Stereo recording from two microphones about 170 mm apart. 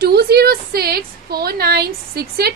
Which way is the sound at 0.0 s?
65° right (ahead or behind).